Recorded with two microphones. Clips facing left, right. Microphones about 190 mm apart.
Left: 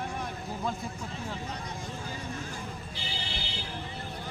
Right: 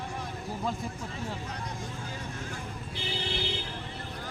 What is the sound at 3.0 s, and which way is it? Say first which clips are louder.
Music: right 9 dB; 55° right (ahead or behind).